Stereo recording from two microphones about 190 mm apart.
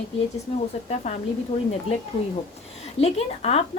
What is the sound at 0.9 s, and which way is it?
Speech, 35° left (ahead or behind).